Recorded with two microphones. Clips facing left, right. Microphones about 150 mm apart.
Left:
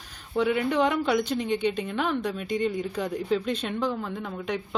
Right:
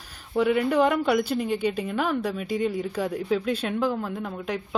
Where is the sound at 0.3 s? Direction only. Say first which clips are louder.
Right 2 dB; 5° right (ahead or behind).